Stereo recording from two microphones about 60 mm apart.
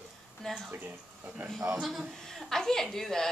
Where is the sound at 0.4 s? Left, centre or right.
Centre.